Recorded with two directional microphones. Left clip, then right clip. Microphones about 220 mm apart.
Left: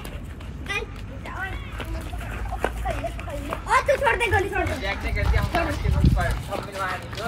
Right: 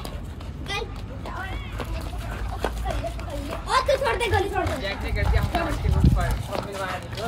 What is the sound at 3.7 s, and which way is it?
Speech, 10° right (ahead or behind).